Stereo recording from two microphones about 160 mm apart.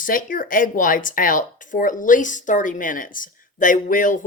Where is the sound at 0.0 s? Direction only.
60° left (ahead or behind).